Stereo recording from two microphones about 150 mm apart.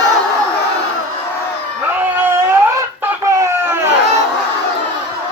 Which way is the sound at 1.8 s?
10° right (ahead or behind).